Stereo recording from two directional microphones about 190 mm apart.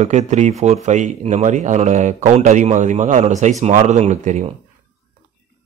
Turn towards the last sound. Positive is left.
turn(degrees=-40)  # may be behind; listen again after turning